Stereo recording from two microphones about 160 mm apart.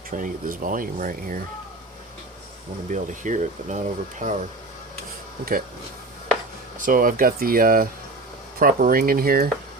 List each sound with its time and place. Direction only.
0.1 s speech: 55° right (ahead or behind)
2.9 s speech: 50° right (ahead or behind)
6.7 s speech: 60° right (ahead or behind)